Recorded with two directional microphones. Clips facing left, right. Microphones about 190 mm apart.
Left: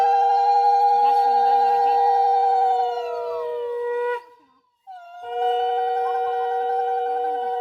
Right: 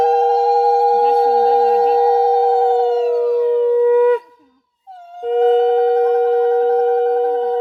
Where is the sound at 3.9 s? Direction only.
70° right (ahead or behind).